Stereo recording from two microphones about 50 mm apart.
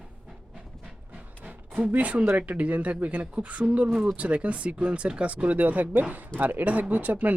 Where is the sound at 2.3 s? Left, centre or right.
Right.